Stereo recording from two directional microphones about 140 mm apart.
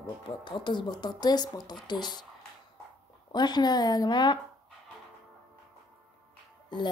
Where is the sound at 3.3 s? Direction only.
30° left (ahead or behind).